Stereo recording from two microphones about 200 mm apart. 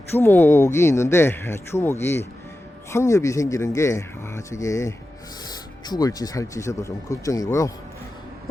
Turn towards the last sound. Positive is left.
turn(degrees=15)  # may be behind; listen again after turning